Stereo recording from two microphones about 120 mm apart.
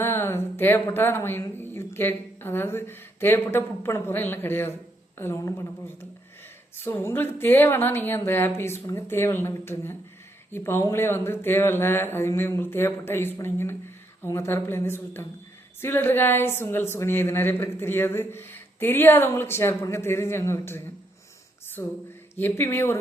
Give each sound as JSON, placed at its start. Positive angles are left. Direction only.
{"t": 0.0, "sound": "a woman's voice", "side_deg": 20}